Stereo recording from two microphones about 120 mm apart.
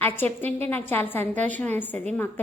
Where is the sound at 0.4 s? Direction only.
15° left (ahead or behind).